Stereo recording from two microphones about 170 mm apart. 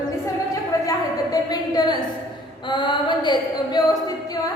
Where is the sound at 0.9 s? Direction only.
20° left (ahead or behind).